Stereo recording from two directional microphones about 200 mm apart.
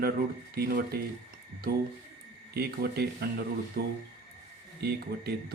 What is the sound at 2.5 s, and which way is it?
Speech, 50° right (ahead or behind).